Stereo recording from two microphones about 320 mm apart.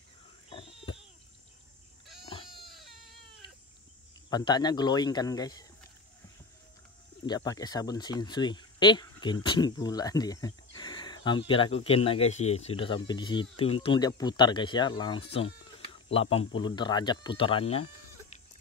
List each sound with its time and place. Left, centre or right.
0.5 s a sound: centre
2.2 s goat: centre
2.6 s baby cry: centre
3.4 s livestock: centre
4.3 s speech: centre
7.2 s speech: centre